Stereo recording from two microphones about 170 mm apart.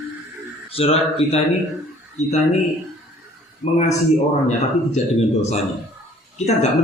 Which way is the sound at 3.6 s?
40° left (ahead or behind).